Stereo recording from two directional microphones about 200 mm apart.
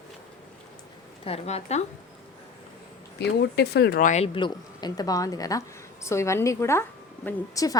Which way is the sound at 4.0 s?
35° left (ahead or behind).